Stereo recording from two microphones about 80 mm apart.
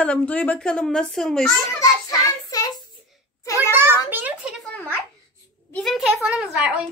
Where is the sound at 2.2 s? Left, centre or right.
Left.